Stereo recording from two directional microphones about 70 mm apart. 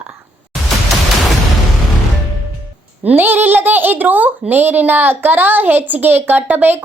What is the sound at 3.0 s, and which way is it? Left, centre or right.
A child's voice, right.